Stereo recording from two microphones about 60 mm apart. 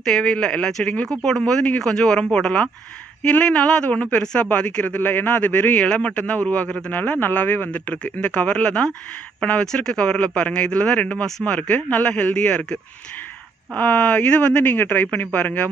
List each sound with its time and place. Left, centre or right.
0.0 s speech: centre; by 7.7 s left
7.7 s speech: left
13.7 s speech: left